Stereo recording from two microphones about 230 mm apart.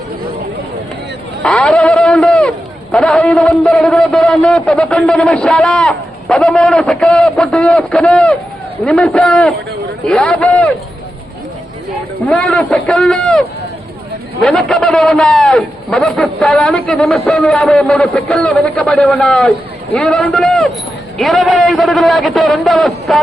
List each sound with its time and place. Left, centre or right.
1.4 s a man's voice: centre
12.3 s a man's voice: centre
14.4 s a man's voice: centre